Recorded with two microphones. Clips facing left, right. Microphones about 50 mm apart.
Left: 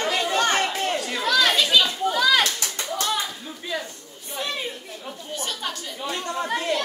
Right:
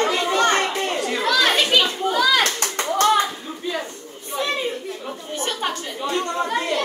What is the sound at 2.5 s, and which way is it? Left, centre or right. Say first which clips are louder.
Clapping: right 5 dB; right.